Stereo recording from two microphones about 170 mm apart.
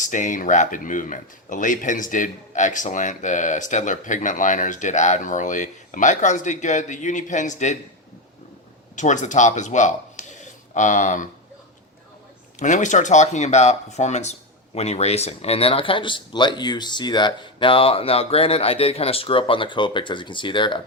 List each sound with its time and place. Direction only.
0.0 s speech: 45° left (ahead or behind)
9.0 s speech: 45° left (ahead or behind)
12.5 s speech: 45° left (ahead or behind); by 20.8 s 30° left (ahead or behind)